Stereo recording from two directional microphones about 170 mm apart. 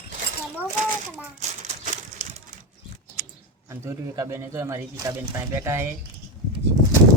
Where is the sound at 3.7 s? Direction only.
15° right (ahead or behind).